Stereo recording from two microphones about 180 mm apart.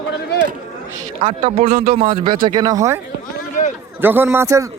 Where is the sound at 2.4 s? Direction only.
20° right (ahead or behind).